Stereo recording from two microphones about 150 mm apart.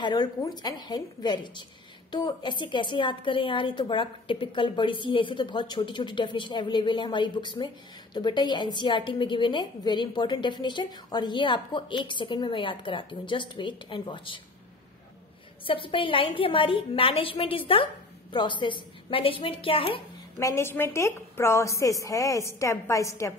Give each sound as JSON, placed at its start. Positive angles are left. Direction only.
{"t": 0.0, "sound": "a woman's voice", "side_deg": 30}
{"t": 15.6, "sound": "speech", "side_deg": 35}
{"t": 20.3, "sound": "a woman's voice", "side_deg": 20}